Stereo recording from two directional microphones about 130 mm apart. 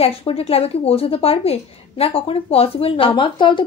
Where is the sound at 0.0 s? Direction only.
50° left (ahead or behind).